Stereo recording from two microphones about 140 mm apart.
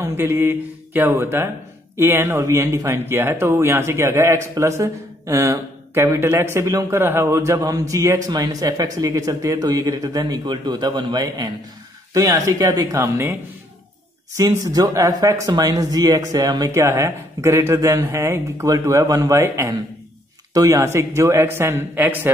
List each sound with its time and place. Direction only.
0.0 s speech: 20° right (ahead or behind)
14.6 s speech: 25° right (ahead or behind)